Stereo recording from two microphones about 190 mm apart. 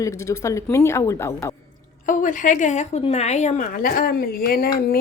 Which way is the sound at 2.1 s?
45° left (ahead or behind).